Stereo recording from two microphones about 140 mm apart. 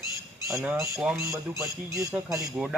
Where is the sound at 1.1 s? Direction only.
20° right (ahead or behind).